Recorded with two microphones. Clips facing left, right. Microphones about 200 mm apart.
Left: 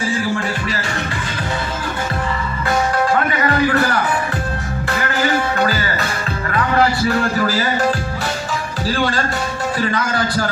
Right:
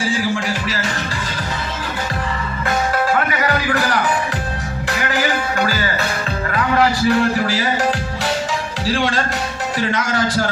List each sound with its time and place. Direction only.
0.0 s music: 90° right
4.9 s music: 45° left (ahead or behind)
9.7 s a man's voice: 90° right